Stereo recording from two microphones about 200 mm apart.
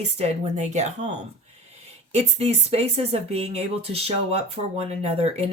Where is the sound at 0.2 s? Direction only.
35° right (ahead or behind).